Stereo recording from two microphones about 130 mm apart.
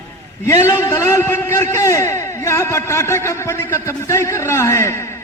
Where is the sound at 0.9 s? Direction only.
20° left (ahead or behind).